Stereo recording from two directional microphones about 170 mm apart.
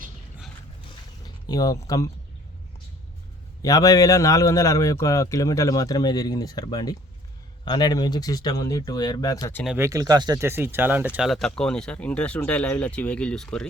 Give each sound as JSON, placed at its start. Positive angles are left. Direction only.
{"t": 1.2, "sound": "speech", "side_deg": 20}
{"t": 3.6, "sound": "a man's voice", "side_deg": 20}
{"t": 9.7, "sound": "speech", "side_deg": -15}